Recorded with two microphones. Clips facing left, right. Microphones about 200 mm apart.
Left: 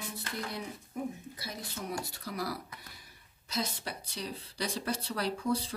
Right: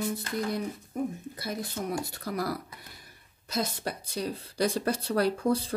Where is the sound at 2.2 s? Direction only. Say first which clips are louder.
Right 5 dB; 50° right (ahead or behind).